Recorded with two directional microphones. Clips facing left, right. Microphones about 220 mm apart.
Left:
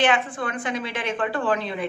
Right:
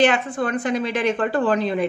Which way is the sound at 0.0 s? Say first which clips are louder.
Right 4 dB; 40° right (ahead or behind).